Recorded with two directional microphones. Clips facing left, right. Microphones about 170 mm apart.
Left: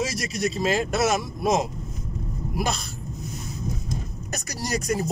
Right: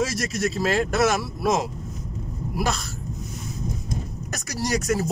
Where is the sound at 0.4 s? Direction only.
20° left (ahead or behind).